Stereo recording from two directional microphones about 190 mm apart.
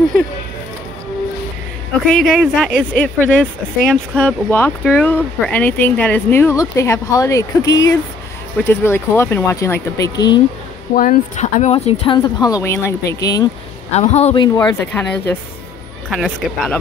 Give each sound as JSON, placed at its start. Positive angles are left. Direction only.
{"t": 2.1, "sound": "speech", "side_deg": 0}
{"t": 11.0, "sound": "speech", "side_deg": 40}
{"t": 13.9, "sound": "speech", "side_deg": 35}
{"t": 16.1, "sound": "speech", "side_deg": 0}